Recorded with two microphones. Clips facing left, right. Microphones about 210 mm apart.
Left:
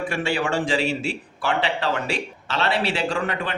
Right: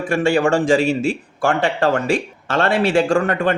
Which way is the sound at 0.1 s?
45° right (ahead or behind).